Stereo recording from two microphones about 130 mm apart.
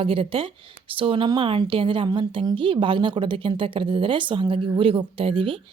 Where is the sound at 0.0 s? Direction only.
45° right (ahead or behind).